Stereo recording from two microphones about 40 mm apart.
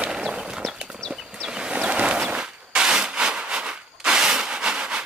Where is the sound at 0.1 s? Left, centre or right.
Centre.